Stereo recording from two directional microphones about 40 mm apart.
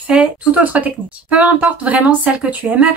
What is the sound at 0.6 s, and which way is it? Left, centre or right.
A woman's voice, right.